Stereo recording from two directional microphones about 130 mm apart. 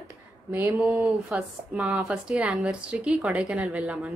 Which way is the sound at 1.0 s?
Centre (ahead or behind).